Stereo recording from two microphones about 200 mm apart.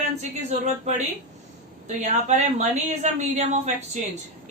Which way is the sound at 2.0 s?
35° right (ahead or behind).